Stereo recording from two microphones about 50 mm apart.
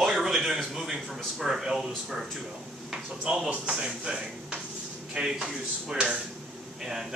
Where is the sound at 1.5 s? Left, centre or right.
Centre.